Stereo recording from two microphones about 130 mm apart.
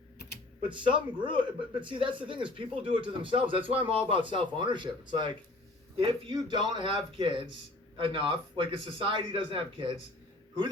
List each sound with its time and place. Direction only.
0.6 s a man's voice: 40° right (ahead or behind)